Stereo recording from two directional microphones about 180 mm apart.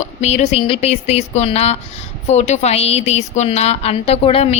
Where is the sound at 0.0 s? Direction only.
40° left (ahead or behind).